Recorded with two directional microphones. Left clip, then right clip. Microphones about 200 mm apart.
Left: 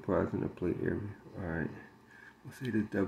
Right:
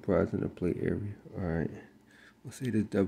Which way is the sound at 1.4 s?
55° right (ahead or behind).